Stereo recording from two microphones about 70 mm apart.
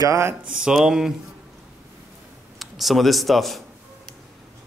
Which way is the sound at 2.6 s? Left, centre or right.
Centre.